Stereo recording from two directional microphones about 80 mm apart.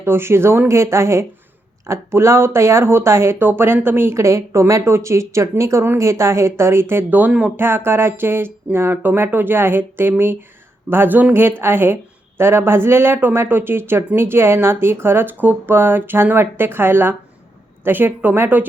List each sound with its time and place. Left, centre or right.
0.0 s speech: right